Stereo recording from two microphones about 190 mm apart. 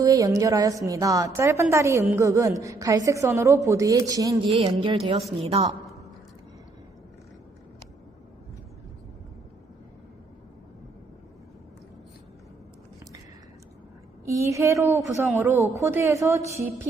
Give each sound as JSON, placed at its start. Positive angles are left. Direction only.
{"t": 0.0, "sound": "a woman's voice", "side_deg": -15}
{"t": 4.5, "sound": "music", "side_deg": -30}
{"t": 14.3, "sound": "a woman's voice", "side_deg": -15}